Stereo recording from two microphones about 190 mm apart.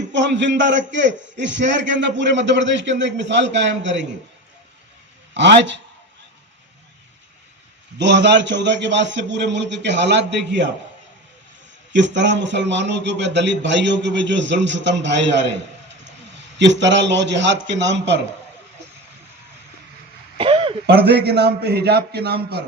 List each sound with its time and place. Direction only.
0.1 s a man's voice: 70° right (ahead or behind)
5.3 s a man's voice: 65° right (ahead or behind)
7.9 s a man's voice: 70° right (ahead or behind)
11.9 s a man's voice: 70° right (ahead or behind)
20.4 s a sound: 30° right (ahead or behind)
20.8 s a man's voice: 55° right (ahead or behind)